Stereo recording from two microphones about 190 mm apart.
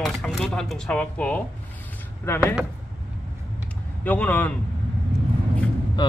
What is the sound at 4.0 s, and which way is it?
Speech, 10° left (ahead or behind).